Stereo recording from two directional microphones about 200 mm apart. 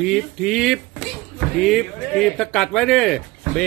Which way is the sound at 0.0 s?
Centre (ahead or behind).